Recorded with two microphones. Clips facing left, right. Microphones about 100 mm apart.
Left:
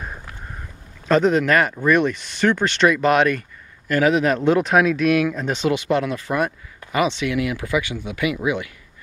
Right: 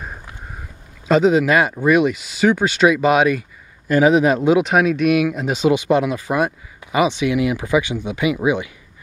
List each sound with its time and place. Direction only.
1.0 s speech: 10° right (ahead or behind)